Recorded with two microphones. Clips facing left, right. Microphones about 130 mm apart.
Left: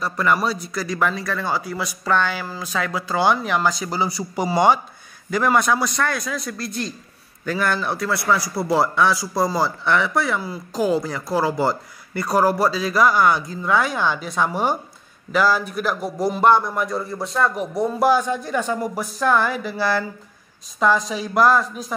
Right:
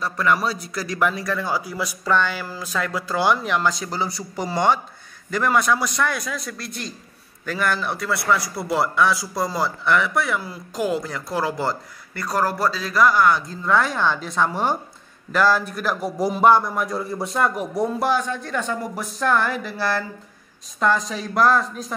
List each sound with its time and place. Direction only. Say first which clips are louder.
0.0 s a man's voice: left 1 dB; centre (ahead or behind)
10.7 s speech: left 3 dB; 30° left (ahead or behind)
11.0 s a man's voice: left 4 dB; 5° left (ahead or behind)